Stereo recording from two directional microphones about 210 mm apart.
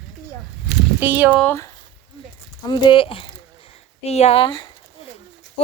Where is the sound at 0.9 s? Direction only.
10° right (ahead or behind).